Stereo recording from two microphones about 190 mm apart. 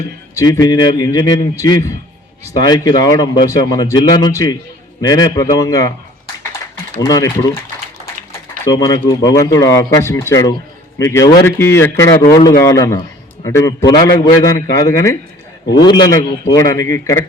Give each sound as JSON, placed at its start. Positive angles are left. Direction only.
{"t": 0.3, "sound": "a man's voice", "side_deg": 20}
{"t": 7.0, "sound": "a man's voice", "side_deg": 15}
{"t": 8.6, "sound": "a man's voice", "side_deg": 20}